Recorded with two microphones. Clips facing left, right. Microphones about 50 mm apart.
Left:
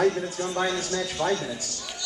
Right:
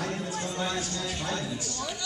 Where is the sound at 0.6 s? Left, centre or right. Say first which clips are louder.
Left 7 dB; left.